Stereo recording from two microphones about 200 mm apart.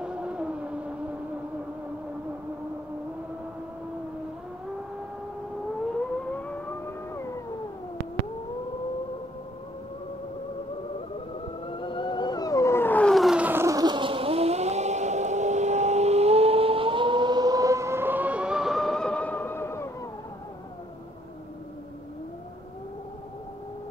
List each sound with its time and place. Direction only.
0.0 s vehicle: 5° right (ahead or behind)
6.3 s vehicle: 5° left (ahead or behind)
11.6 s a sound: 25° left (ahead or behind)